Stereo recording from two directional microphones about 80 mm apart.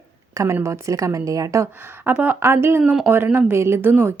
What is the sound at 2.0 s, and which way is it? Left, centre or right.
A woman's voice, right.